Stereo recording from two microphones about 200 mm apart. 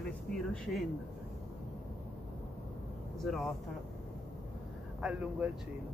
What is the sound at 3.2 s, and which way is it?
Speech, centre (ahead or behind).